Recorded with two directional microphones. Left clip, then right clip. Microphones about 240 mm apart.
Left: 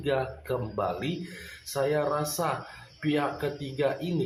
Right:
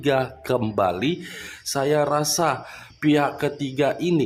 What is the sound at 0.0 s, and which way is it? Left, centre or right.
Speech, right.